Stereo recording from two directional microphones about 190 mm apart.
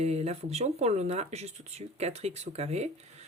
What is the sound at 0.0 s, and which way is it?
Speech, 35° right (ahead or behind).